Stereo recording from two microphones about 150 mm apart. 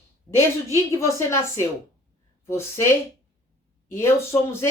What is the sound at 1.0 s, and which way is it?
A woman's voice, 20° left (ahead or behind).